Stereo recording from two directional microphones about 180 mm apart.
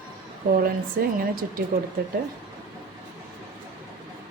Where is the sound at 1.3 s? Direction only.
50° right (ahead or behind).